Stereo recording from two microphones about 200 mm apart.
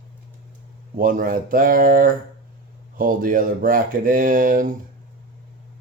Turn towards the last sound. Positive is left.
turn(degrees=-45)  # may be behind; listen again after turning